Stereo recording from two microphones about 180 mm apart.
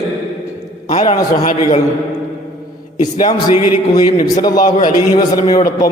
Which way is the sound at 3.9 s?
20° left (ahead or behind).